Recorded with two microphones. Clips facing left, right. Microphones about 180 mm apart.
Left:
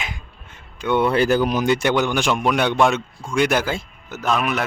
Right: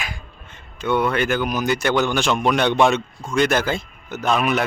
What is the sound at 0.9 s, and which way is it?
Speech, 30° left (ahead or behind).